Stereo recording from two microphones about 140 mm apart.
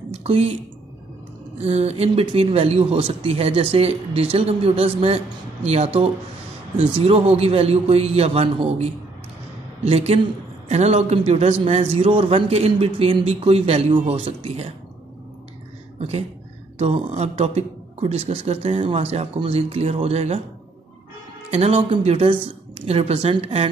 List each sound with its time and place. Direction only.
0.1 s speech: 45° right (ahead or behind)
1.6 s speech: 45° right (ahead or behind)
16.0 s speech: 50° right (ahead or behind)
21.5 s speech: 50° right (ahead or behind)